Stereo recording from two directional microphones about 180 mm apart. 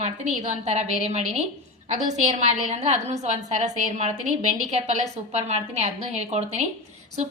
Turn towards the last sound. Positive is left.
turn(degrees=-40)  # may be behind; listen again after turning